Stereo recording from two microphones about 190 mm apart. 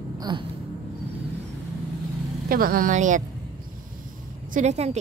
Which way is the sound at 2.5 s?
50° right (ahead or behind).